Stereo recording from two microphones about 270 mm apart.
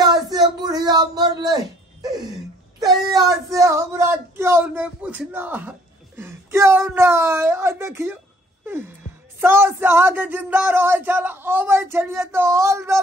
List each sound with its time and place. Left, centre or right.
0.0 s a sound: centre
2.8 s speech: centre
9.4 s speech: centre